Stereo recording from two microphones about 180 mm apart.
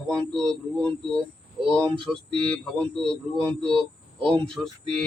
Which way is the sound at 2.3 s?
30° right (ahead or behind).